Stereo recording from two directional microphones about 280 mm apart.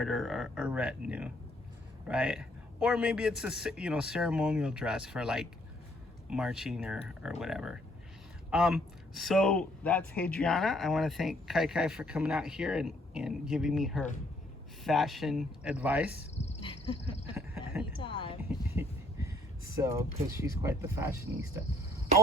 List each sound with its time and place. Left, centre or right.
0.0 s a man's voice: centre
16.4 s a sound: left
18.8 s speech: centre